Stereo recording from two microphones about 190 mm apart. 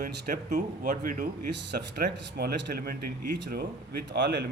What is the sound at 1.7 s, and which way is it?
Speech, 60° right (ahead or behind).